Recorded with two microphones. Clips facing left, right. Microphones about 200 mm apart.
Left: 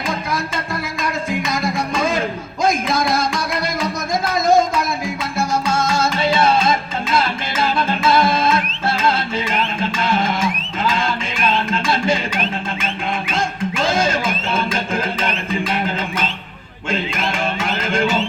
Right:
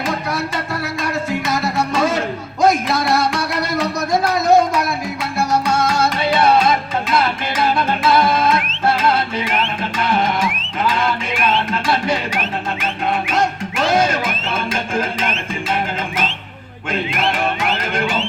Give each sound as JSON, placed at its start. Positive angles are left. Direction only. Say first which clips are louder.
{"t": 0.1, "sound": "music", "louder": "right 1 dB", "side_deg": -70}
{"t": 12.0, "sound": "music", "louder": "left 1 dB", "side_deg": -65}
{"t": 13.9, "sound": "music", "louder": "right 2 dB", "side_deg": -55}